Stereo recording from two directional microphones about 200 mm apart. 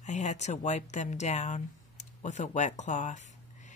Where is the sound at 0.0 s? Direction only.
35° left (ahead or behind).